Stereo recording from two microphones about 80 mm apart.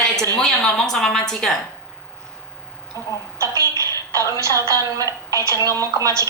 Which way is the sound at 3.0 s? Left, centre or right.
Right.